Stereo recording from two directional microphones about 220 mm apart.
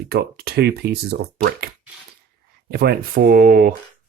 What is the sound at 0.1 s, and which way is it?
Speech, 45° right (ahead or behind).